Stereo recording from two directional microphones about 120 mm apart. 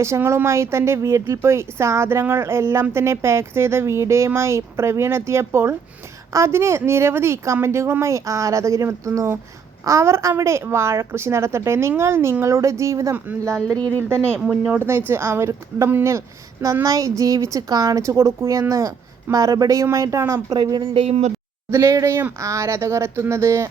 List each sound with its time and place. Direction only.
0.0 s speech: 25° right (ahead or behind)
13.7 s speech: 10° left (ahead or behind)
14.3 s speech: 5° right (ahead or behind)
14.8 s speech: 20° right (ahead or behind)
20.6 s speech: 40° right (ahead or behind); by 21.3 s 65° right (ahead or behind)
21.7 s speech: 25° right (ahead or behind)